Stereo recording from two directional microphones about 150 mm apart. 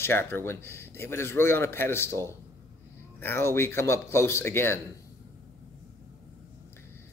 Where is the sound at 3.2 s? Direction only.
15° left (ahead or behind).